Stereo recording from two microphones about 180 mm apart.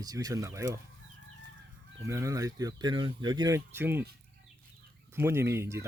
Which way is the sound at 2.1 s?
15° right (ahead or behind).